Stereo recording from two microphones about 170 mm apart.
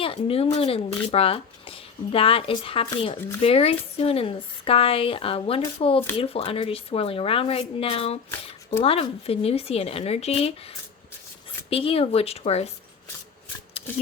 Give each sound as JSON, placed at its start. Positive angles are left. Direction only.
{"t": 0.0, "sound": "speech", "side_deg": 35}